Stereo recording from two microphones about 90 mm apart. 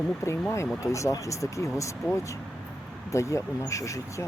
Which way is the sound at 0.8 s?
35° left (ahead or behind).